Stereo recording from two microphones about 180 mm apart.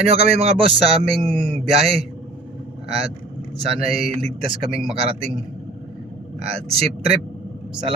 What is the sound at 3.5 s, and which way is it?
Speech, 30° right (ahead or behind).